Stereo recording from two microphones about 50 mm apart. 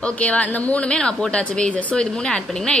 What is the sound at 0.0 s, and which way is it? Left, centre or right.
A woman's voice, left.